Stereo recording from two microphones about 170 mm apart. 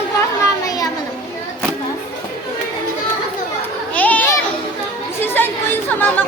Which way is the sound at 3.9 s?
10° left (ahead or behind).